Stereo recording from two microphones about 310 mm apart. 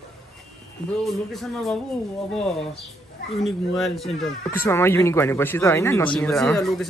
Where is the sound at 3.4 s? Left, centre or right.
Centre.